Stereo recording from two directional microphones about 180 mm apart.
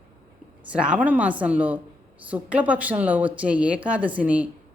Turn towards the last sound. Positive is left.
turn(degrees=-10)  # may be behind; listen again after turning